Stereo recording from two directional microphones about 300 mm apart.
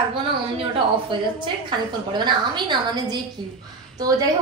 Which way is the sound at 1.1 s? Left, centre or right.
Centre.